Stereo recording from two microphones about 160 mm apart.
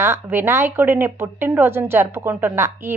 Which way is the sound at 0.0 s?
15° right (ahead or behind).